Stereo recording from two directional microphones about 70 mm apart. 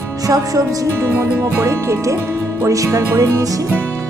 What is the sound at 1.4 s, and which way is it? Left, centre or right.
Music, right.